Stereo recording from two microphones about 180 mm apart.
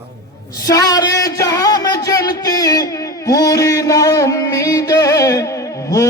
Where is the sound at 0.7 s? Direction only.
20° left (ahead or behind).